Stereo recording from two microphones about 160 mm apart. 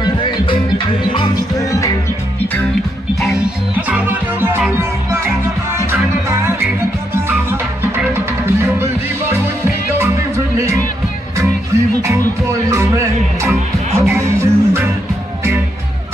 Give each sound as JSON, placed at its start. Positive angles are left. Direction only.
{"t": 0.0, "sound": "music", "side_deg": 30}
{"t": 3.9, "sound": "music", "side_deg": -10}
{"t": 8.5, "sound": "music", "side_deg": -15}